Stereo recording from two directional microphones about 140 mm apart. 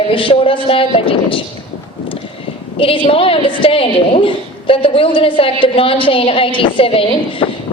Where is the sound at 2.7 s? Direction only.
40° left (ahead or behind).